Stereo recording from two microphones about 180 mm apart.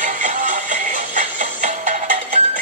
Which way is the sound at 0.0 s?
40° right (ahead or behind).